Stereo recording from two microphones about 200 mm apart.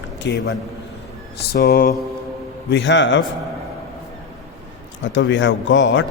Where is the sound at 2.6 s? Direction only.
65° left (ahead or behind).